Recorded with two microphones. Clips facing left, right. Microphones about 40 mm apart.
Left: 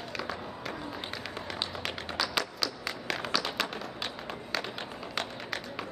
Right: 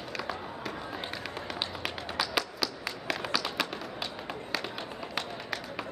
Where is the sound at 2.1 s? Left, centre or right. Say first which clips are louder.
Right 1 dB; centre.